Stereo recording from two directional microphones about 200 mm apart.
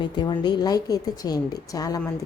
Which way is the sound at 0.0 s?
20° left (ahead or behind).